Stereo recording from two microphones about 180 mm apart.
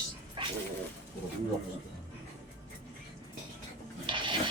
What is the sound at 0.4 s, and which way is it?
Bird, 25° right (ahead or behind).